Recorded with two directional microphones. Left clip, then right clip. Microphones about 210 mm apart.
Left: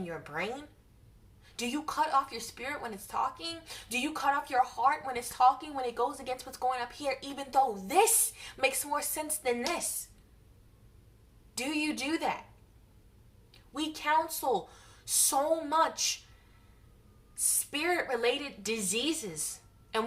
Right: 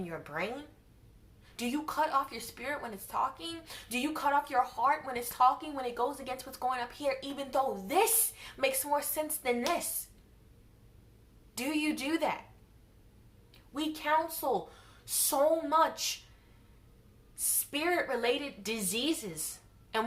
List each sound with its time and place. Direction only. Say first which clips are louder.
0.0 s speech: left 1 dB; 5° left (ahead or behind)
1.5 s speech: left 1 dB; 5° left (ahead or behind)
11.5 s speech: even; 5° left (ahead or behind)
13.5 s a woman's voice: even; 5° left (ahead or behind)
17.3 s speech: left 2 dB; 10° left (ahead or behind)